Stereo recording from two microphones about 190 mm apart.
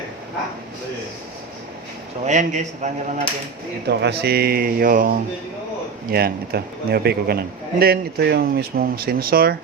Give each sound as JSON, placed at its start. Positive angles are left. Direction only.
{"t": 2.2, "sound": "a man's voice", "side_deg": -40}
{"t": 3.8, "sound": "speech", "side_deg": -60}